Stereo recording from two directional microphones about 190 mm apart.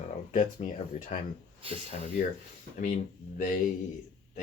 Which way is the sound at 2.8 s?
40° left (ahead or behind).